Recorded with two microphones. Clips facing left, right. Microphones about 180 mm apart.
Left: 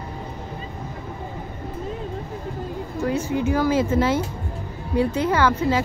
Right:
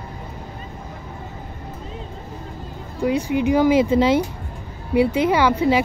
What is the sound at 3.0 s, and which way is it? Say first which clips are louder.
A woman's voice: right 4 dB; 15° right (ahead or behind).